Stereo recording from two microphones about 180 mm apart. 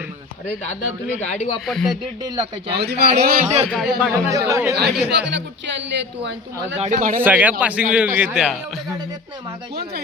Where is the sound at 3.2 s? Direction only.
55° right (ahead or behind).